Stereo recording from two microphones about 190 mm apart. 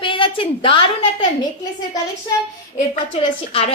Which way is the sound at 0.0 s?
25° left (ahead or behind).